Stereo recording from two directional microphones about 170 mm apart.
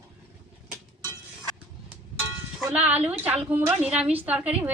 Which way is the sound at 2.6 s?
10° right (ahead or behind).